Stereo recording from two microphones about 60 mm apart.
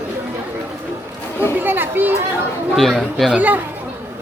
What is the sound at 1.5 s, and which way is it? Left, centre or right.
Chatter, right.